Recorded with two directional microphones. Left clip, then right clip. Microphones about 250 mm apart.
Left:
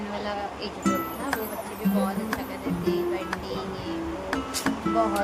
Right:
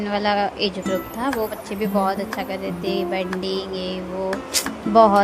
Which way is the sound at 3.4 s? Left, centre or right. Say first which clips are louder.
Right 7 dB; right.